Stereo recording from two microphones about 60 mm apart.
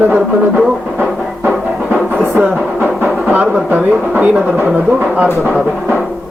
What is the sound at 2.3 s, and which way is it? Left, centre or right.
Music, right.